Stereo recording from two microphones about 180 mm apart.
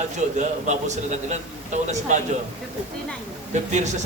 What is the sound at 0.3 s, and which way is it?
A man's voice, 40° right (ahead or behind).